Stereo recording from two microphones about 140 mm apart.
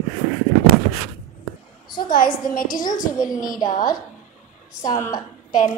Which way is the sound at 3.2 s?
25° left (ahead or behind).